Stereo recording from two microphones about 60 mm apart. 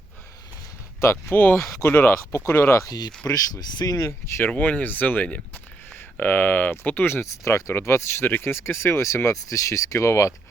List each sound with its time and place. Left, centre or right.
1.0 s speech: left
3.2 s speech: left
4.4 s speech: left
7.3 s speech: left
7.7 s speech: left